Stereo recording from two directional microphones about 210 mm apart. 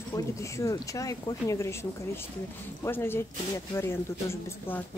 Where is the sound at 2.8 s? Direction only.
10° left (ahead or behind).